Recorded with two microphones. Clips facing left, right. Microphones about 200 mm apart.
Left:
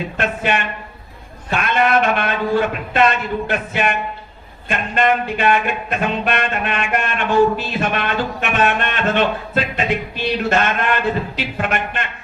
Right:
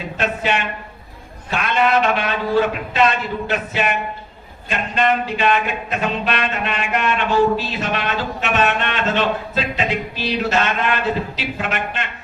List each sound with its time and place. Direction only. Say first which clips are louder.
0.2 s a man's voice: even; 55° left (ahead or behind)
4.7 s music: left 1 dB; 55° left (ahead or behind)